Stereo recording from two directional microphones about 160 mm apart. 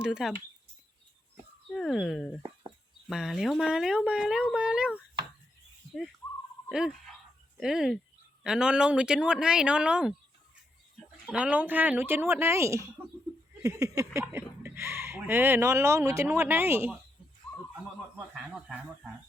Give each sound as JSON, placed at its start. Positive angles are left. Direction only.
{"t": 0.0, "sound": "speech", "side_deg": -5}
{"t": 1.7, "sound": "speech", "side_deg": 0}
{"t": 6.7, "sound": "speech", "side_deg": -5}
{"t": 11.3, "sound": "speech", "side_deg": -10}
{"t": 13.6, "sound": "a sound", "side_deg": -20}
{"t": 14.6, "sound": "speech", "side_deg": -15}
{"t": 18.3, "sound": "speech", "side_deg": -5}